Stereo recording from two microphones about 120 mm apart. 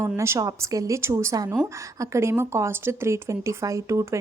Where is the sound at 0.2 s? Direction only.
25° right (ahead or behind).